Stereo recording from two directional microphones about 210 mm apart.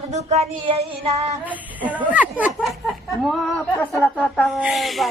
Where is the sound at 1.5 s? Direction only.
5° right (ahead or behind).